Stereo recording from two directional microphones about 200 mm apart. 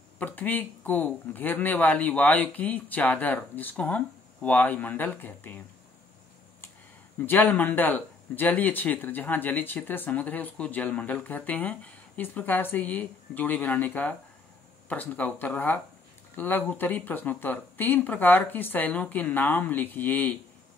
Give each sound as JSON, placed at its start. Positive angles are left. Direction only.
{"t": 0.2, "sound": "speech", "side_deg": 10}
{"t": 7.2, "sound": "speech", "side_deg": 5}